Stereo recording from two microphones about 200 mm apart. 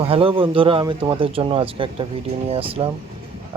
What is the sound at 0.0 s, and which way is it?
Speech, 25° right (ahead or behind).